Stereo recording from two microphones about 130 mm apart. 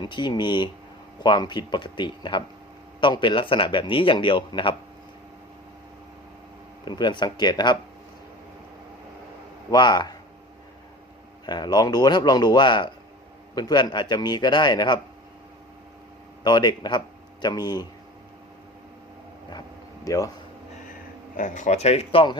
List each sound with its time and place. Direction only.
0.0 s speech: 35° left (ahead or behind)
6.8 s speech: 35° left (ahead or behind)
9.7 s speech: 35° left (ahead or behind)
11.4 s speech: 30° left (ahead or behind)
16.4 s speech: 30° left (ahead or behind)
20.1 s speech: 25° left (ahead or behind)
21.3 s speech: 75° left (ahead or behind); by 22.4 s 45° left (ahead or behind)